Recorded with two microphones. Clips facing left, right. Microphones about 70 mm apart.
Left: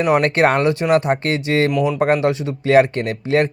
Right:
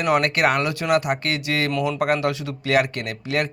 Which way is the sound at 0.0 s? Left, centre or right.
Left.